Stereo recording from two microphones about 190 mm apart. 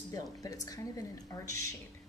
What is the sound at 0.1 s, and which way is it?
Speech, 20° left (ahead or behind).